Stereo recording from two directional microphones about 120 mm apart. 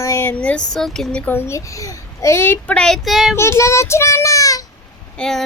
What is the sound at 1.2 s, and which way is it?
A child's voice, 20° left (ahead or behind).